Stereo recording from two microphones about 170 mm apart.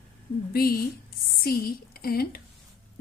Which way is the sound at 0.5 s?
60° left (ahead or behind).